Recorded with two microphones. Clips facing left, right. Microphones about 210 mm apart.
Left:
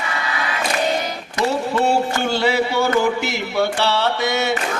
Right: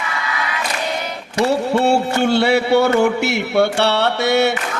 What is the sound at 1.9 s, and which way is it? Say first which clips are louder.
Mantra: right 3 dB; 65° right (ahead or behind).